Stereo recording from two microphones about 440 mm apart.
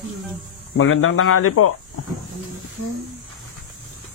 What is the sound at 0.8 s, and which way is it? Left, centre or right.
Speech, left.